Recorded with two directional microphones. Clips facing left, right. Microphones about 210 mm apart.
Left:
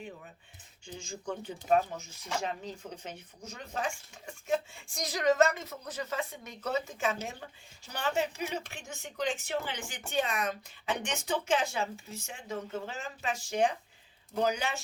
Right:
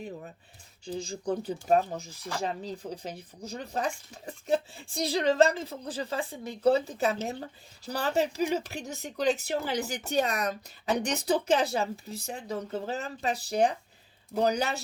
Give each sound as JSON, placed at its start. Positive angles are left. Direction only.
{"t": 0.9, "sound": "speech", "side_deg": -35}